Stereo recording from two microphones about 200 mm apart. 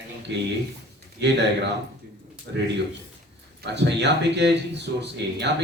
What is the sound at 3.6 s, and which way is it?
Speech, 60° right (ahead or behind).